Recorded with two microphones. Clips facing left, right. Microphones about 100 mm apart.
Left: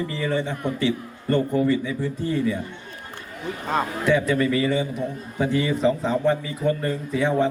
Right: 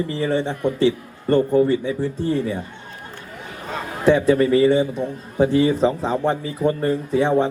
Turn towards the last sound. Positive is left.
turn(degrees=-30)  # may be behind; listen again after turning